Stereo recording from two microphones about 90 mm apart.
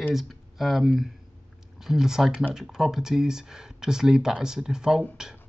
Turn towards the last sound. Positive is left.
turn(degrees=-5)  # may be behind; listen again after turning